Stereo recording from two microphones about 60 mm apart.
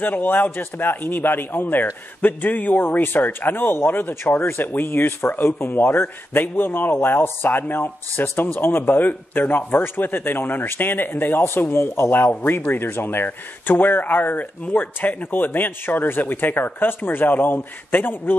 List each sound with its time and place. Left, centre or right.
0.0 s speech: left